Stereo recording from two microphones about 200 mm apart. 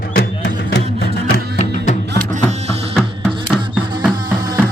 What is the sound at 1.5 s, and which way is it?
Music, 35° left (ahead or behind).